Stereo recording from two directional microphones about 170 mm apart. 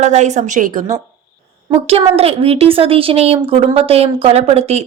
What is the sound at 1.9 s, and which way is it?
A woman's voice, 35° right (ahead or behind).